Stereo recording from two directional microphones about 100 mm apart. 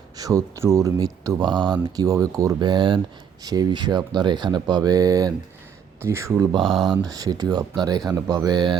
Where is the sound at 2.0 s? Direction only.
35° right (ahead or behind).